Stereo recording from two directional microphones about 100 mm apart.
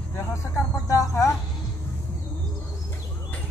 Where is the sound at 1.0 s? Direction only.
30° left (ahead or behind).